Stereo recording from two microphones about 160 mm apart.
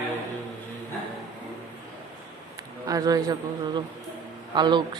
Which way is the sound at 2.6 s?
25° right (ahead or behind).